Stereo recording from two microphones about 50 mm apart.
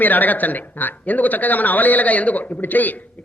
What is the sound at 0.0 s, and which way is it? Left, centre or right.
Speech, left.